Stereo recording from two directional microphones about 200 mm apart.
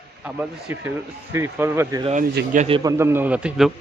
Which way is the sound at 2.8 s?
15° right (ahead or behind).